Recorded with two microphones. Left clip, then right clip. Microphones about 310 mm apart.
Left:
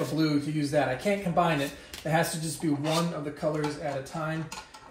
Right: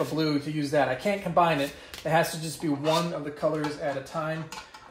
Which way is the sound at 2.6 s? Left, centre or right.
Centre.